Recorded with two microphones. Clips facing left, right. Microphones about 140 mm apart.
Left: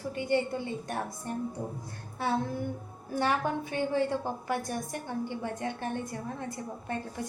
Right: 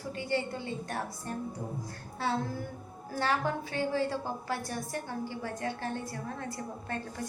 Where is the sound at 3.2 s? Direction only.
20° left (ahead or behind).